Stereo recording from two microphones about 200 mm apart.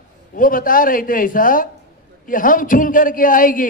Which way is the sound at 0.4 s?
45° left (ahead or behind).